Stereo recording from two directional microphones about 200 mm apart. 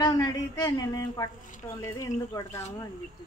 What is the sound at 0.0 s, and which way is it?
Speech, 20° left (ahead or behind).